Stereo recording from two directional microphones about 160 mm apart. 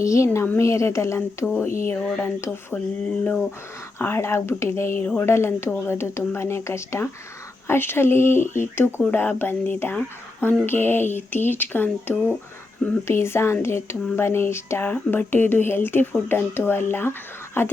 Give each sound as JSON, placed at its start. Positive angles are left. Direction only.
{"t": 0.0, "sound": "speech", "side_deg": 20}
{"t": 3.9, "sound": "speech", "side_deg": 15}